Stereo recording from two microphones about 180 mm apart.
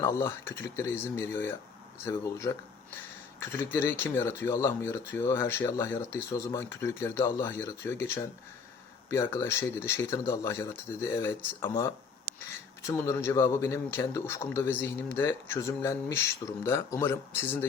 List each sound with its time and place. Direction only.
0.0 s speech: 15° left (ahead or behind)
12.8 s speech: 15° left (ahead or behind)